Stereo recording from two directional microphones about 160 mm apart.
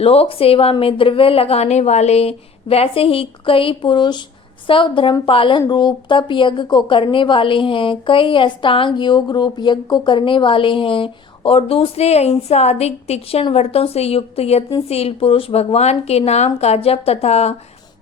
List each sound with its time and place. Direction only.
0.0 s a woman's voice: 40° left (ahead or behind)